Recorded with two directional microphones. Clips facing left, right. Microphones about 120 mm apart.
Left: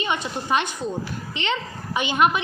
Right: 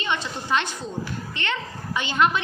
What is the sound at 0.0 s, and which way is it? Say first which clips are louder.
A woman's voice: left 2 dB; 15° left (ahead or behind).